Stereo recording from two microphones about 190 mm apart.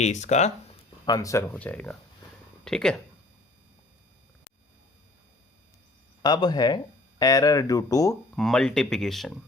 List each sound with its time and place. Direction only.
0.0 s speech: 40° left (ahead or behind)
1.0 s speech: 20° left (ahead or behind); by 2.9 s 5° left (ahead or behind)
6.2 s speech: 20° left (ahead or behind)
8.4 s speech: 5° left (ahead or behind)